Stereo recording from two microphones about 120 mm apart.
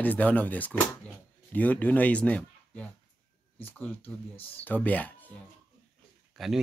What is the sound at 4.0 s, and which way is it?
Speech, 55° left (ahead or behind).